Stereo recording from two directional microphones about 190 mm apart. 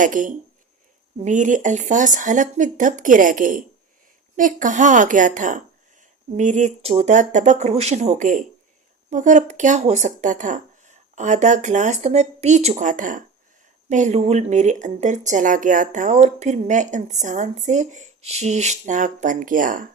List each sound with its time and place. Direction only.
0.0 s speech: 45° right (ahead or behind)